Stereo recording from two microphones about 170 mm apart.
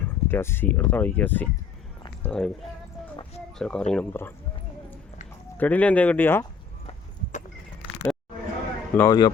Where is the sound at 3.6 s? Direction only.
5° left (ahead or behind).